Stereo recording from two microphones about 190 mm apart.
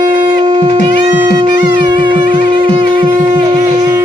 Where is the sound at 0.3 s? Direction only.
25° right (ahead or behind).